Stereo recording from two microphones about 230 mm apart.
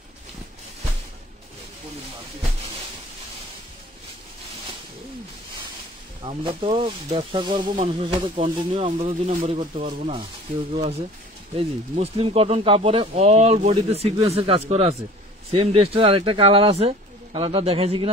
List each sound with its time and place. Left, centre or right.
6.2 s speech: right